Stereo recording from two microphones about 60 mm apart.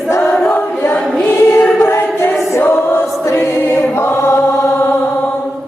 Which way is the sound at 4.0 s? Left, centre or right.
Left.